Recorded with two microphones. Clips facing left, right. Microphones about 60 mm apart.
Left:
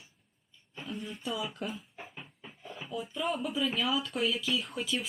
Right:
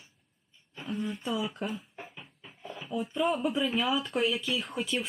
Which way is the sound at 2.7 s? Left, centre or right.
Centre.